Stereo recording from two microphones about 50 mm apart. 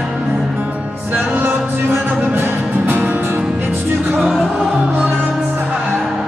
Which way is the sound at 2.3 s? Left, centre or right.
Right.